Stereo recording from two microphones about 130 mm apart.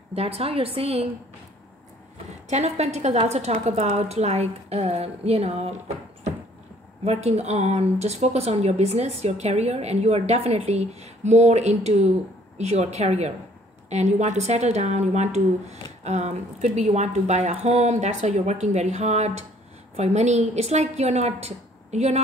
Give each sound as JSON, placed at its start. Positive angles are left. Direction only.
{"t": 0.1, "sound": "a woman's voice", "side_deg": -50}
{"t": 2.5, "sound": "a woman's voice", "side_deg": -60}
{"t": 7.1, "sound": "speech", "side_deg": -55}